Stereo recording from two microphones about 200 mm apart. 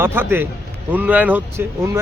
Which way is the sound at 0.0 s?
10° right (ahead or behind).